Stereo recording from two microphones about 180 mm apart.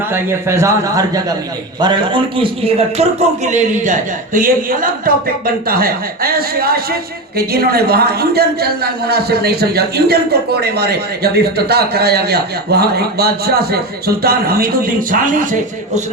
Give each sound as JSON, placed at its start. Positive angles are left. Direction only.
{"t": 0.1, "sound": "a man's voice", "side_deg": -15}